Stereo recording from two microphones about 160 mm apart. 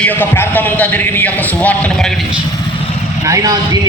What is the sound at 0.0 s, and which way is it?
A man's voice, 10° left (ahead or behind).